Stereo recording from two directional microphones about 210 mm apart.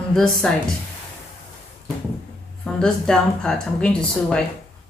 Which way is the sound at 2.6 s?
5° left (ahead or behind).